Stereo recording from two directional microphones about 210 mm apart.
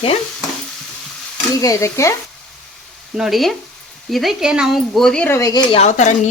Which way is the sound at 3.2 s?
Centre (ahead or behind).